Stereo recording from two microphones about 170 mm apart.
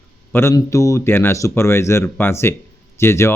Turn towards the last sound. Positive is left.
turn(degrees=15)  # may be behind; listen again after turning